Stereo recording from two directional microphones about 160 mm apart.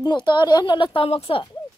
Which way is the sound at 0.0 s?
30° left (ahead or behind).